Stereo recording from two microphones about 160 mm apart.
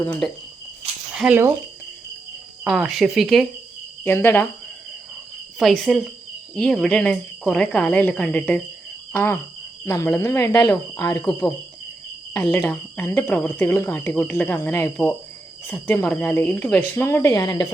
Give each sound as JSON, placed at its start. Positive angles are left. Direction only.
{"t": 0.0, "sound": "speech", "side_deg": 10}
{"t": 1.1, "sound": "speech", "side_deg": -5}
{"t": 2.6, "sound": "speech", "side_deg": 0}
{"t": 4.0, "sound": "speech", "side_deg": 15}
{"t": 5.5, "sound": "speech", "side_deg": 0}
{"t": 12.3, "sound": "speech", "side_deg": 15}